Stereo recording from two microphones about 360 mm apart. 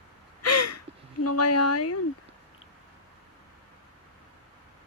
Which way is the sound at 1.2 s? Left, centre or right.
Left.